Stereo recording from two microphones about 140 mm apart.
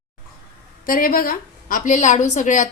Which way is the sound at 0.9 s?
90° left.